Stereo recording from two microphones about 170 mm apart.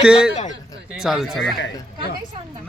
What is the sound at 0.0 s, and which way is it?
A man's voice, 5° right (ahead or behind).